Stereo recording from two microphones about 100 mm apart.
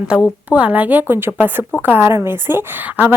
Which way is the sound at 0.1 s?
10° right (ahead or behind).